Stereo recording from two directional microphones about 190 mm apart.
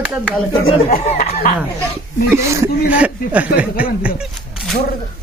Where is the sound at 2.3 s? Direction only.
15° right (ahead or behind).